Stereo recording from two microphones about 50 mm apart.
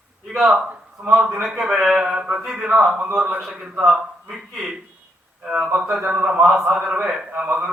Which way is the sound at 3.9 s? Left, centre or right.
Centre.